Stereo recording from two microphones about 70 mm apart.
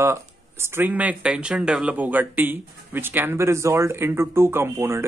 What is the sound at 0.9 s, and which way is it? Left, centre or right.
Speech, right.